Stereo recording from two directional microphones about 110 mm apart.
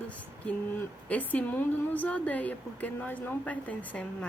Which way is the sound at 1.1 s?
15° left (ahead or behind).